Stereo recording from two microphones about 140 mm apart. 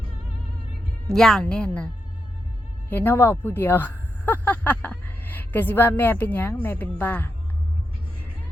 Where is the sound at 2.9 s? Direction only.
15° left (ahead or behind).